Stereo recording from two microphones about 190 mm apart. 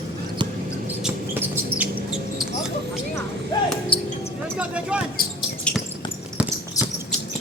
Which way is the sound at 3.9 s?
30° left (ahead or behind).